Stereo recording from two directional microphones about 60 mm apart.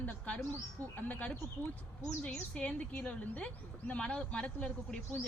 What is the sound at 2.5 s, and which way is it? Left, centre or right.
Speech, left.